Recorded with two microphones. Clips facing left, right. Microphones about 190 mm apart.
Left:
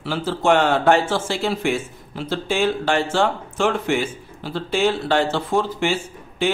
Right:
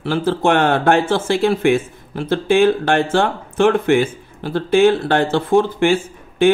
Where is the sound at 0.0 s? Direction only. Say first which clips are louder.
Right 5 dB; 55° right (ahead or behind).